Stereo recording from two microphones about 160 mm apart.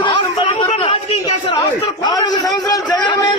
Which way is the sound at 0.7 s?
35° left (ahead or behind).